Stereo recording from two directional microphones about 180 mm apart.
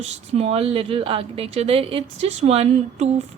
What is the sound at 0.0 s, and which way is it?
Speech, 35° right (ahead or behind).